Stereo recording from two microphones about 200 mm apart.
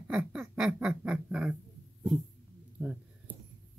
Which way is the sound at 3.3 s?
10° right (ahead or behind).